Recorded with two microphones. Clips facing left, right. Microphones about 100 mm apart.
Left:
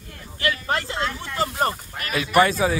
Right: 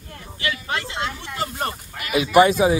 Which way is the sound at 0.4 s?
40° left (ahead or behind).